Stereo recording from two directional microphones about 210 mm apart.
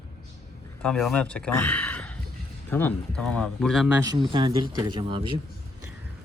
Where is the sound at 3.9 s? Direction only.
20° right (ahead or behind).